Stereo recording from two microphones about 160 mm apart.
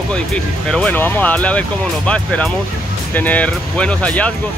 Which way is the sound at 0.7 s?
10° left (ahead or behind).